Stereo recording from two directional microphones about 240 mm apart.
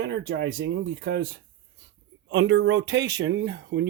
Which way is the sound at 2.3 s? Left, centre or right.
Right.